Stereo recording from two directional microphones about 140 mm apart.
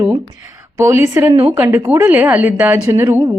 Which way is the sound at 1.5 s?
15° right (ahead or behind).